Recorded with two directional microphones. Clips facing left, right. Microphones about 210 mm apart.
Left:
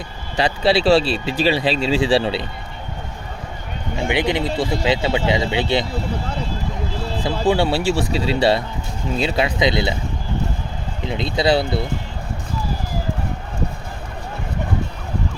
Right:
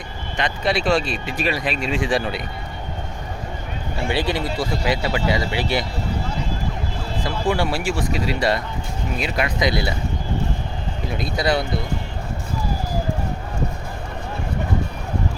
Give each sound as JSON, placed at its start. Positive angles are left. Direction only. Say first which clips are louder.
{"t": 0.3, "sound": "speech", "louder": "left 5 dB", "side_deg": 30}
{"t": 4.1, "sound": "speech", "louder": "left 3 dB", "side_deg": 20}
{"t": 7.3, "sound": "speech", "louder": "left 4 dB", "side_deg": 25}
{"t": 11.1, "sound": "speech", "louder": "left 4 dB", "side_deg": 25}